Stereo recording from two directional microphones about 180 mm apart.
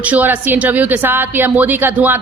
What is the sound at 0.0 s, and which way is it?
A woman's voice, 10° right (ahead or behind).